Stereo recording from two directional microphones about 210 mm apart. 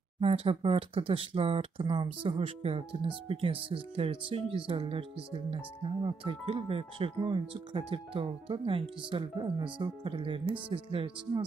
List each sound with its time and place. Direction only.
0.2 s speech: 25° right (ahead or behind)